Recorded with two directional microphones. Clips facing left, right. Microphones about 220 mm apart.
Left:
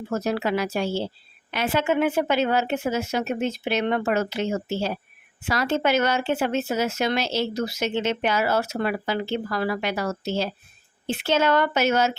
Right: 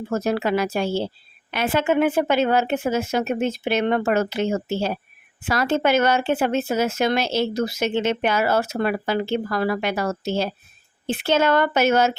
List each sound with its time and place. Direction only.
0.1 s speech: 50° right (ahead or behind)